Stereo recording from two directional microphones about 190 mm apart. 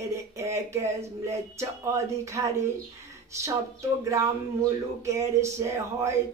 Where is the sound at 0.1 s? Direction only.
15° right (ahead or behind).